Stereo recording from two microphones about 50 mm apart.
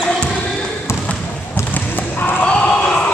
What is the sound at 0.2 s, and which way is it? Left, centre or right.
Basketball bounce, centre.